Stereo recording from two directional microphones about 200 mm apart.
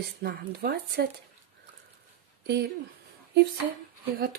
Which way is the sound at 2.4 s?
55° right (ahead or behind).